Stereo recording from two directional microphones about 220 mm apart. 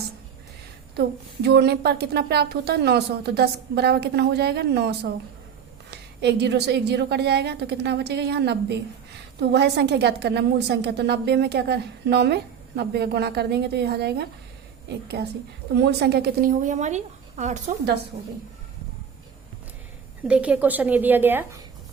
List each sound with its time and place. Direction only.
0.9 s a woman's voice: 50° right (ahead or behind); by 17.6 s 30° right (ahead or behind)
20.2 s a woman's voice: 5° right (ahead or behind)